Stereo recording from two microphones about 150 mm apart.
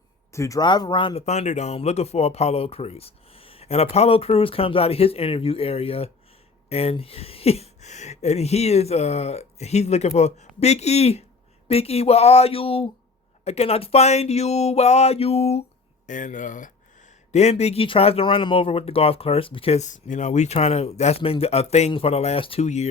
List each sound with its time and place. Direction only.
0.3 s speech: 20° left (ahead or behind)
1.2 s speech: 50° left (ahead or behind)
16.0 s speech: 60° left (ahead or behind)
17.3 s speech: 45° left (ahead or behind)